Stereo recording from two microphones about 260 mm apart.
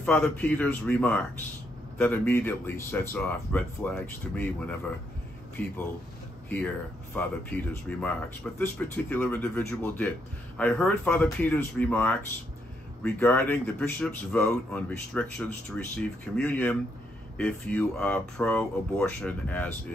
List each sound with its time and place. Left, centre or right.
0.0 s speech: centre
7.2 s a man's voice: centre